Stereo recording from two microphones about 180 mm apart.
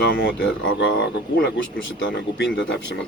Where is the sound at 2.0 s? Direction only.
90° left.